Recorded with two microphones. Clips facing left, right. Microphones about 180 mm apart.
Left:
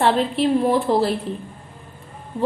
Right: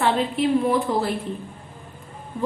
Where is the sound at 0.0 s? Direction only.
30° left (ahead or behind).